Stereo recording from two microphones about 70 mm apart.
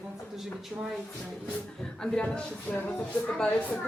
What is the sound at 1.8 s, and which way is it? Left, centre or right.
A woman's voice, centre.